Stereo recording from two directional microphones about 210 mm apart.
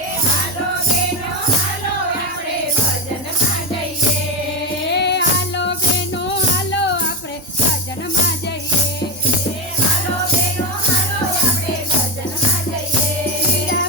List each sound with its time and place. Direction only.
4.9 s music: 55° left (ahead or behind)